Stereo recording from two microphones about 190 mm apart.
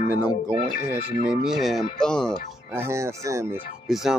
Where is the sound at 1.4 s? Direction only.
Centre (ahead or behind).